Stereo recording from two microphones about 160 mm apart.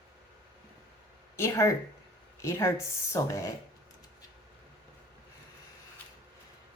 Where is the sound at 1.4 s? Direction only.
20° left (ahead or behind).